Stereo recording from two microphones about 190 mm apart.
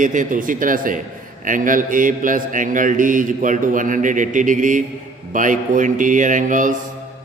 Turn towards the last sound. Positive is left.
turn(degrees=-40)  # may be behind; listen again after turning